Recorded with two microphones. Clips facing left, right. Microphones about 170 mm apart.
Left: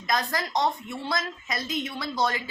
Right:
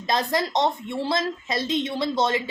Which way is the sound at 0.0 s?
25° right (ahead or behind).